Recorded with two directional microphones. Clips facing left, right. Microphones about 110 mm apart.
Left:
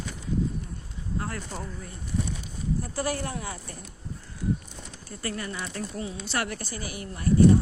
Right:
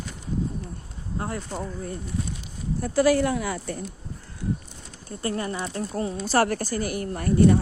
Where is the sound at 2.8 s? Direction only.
90° right.